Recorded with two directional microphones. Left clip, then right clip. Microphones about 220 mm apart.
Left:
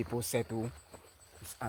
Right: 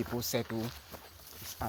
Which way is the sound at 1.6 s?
30° left (ahead or behind).